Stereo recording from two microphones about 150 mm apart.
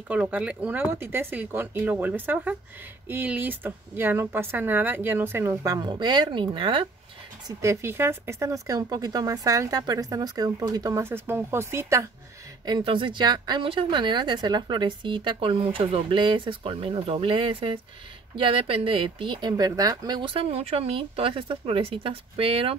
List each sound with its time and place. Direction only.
0.1 s speech: 10° right (ahead or behind); by 6.9 s 35° right (ahead or behind)
7.4 s speech: 20° right (ahead or behind)
12.6 s speech: 30° right (ahead or behind)